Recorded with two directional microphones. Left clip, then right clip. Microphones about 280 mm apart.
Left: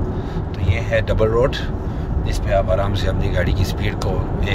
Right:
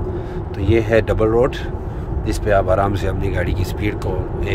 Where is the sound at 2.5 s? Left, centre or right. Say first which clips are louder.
Right 3 dB; centre.